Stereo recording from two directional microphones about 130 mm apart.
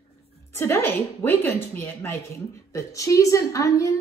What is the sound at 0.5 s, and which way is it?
A woman's voice, 20° left (ahead or behind).